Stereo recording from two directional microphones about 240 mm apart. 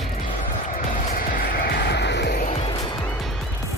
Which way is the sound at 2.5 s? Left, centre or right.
Left.